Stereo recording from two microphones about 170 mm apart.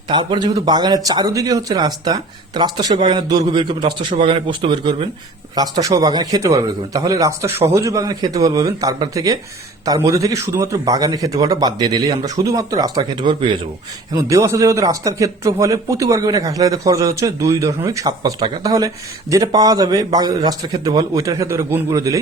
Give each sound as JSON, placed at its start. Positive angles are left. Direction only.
{"t": 0.1, "sound": "a man's voice", "side_deg": -25}